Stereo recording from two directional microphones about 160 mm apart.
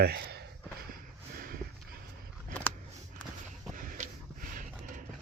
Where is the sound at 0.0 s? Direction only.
85° right.